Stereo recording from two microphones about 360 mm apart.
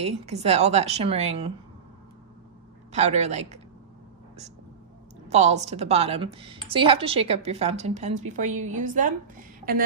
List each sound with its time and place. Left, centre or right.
0.0 s speech: centre
2.9 s a woman's voice: centre
5.3 s speech: centre